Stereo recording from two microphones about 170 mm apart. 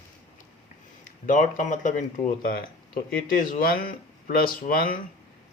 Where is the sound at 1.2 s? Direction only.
50° left (ahead or behind).